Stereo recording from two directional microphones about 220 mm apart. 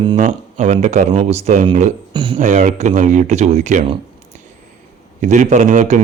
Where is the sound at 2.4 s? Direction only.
35° right (ahead or behind).